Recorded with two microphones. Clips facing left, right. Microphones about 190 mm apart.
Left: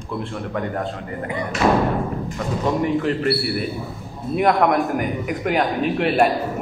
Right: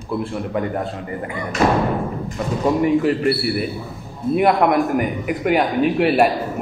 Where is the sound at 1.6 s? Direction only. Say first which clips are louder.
Right 1 dB; 40° right (ahead or behind).